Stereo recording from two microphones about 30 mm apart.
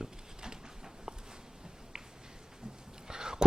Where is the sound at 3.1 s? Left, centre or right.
Right.